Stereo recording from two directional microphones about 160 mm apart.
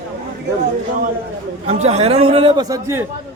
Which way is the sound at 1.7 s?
40° right (ahead or behind).